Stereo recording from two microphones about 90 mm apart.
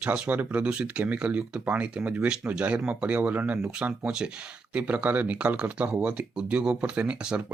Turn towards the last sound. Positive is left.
turn(degrees=-10)  # may be behind; listen again after turning